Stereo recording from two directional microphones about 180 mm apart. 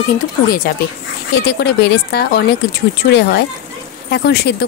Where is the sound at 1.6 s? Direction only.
70° left (ahead or behind).